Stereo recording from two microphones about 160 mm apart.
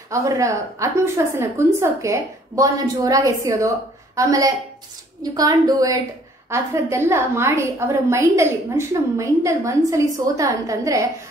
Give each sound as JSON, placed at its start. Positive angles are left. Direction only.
{"t": 0.1, "sound": "a woman's voice", "side_deg": -20}